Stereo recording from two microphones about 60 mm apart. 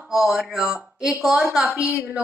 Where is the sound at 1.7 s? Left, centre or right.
Centre.